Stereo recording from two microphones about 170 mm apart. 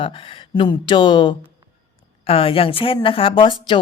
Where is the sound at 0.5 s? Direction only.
30° left (ahead or behind).